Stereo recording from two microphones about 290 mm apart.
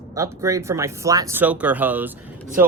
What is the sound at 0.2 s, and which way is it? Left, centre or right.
Speech, centre.